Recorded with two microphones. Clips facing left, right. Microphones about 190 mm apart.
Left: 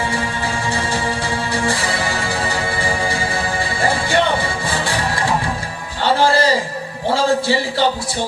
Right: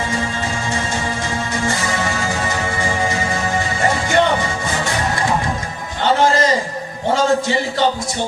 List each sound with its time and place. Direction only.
1.5 s music: 35° left (ahead or behind)
6.2 s a man's voice: 30° left (ahead or behind)